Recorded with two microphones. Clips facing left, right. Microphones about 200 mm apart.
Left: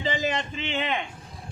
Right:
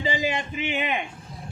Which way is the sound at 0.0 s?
10° right (ahead or behind).